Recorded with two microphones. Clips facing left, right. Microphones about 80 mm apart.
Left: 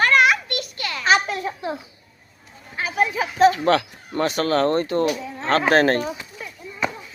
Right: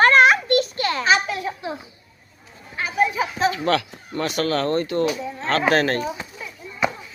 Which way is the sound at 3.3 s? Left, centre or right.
Left.